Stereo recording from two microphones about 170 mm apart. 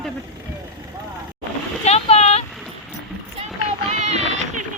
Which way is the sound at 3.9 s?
40° right (ahead or behind).